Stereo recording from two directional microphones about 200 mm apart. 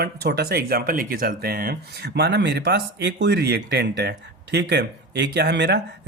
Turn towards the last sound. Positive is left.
turn(degrees=-60)  # may be behind; listen again after turning